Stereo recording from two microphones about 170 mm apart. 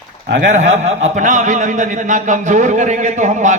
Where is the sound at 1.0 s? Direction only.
45° right (ahead or behind).